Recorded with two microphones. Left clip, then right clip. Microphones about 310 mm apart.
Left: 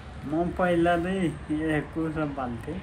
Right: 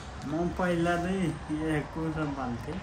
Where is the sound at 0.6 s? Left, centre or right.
Centre.